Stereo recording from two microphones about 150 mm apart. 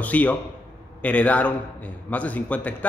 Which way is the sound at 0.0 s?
10° left (ahead or behind).